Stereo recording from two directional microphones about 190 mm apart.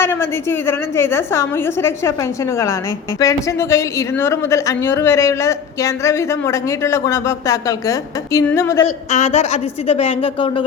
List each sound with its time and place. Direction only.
0.0 s a woman's voice: 10° left (ahead or behind)
3.2 s a woman's voice: 15° left (ahead or behind)
9.1 s a woman's voice: 35° left (ahead or behind)